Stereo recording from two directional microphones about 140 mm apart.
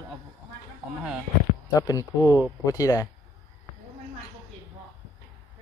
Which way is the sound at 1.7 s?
25° left (ahead or behind).